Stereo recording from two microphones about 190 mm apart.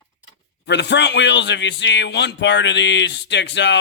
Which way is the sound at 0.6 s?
65° left (ahead or behind).